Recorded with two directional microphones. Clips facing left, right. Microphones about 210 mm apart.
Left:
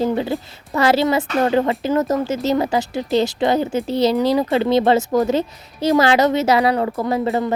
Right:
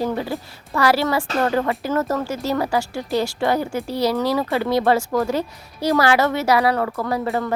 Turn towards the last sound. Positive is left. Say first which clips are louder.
# left 3 dB
turn(degrees=15)  # may be behind; listen again after turning